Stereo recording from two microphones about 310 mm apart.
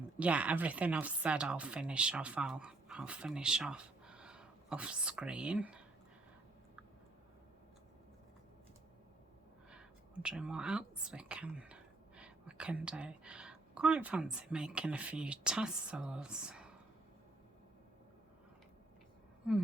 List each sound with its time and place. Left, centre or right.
0.2 s speech: centre
10.2 s speech: centre
19.4 s speech: centre